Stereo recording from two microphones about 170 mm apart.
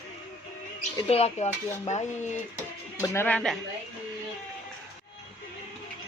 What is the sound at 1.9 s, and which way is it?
Speech, 45° left (ahead or behind).